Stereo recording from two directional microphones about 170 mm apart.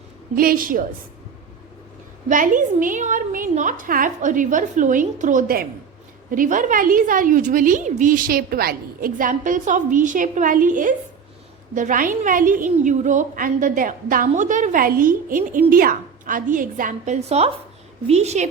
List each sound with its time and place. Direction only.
0.3 s a woman's voice: 55° right (ahead or behind)
2.3 s a woman's voice: 50° right (ahead or behind)
17.2 s a woman's voice: 35° right (ahead or behind)